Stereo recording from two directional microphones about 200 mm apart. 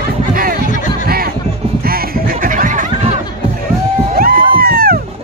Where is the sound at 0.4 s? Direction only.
45° right (ahead or behind).